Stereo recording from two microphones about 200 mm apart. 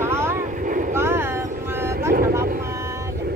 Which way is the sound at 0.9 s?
10° right (ahead or behind).